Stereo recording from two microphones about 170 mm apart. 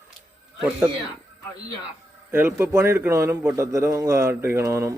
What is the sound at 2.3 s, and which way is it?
A man's voice, 10° right (ahead or behind).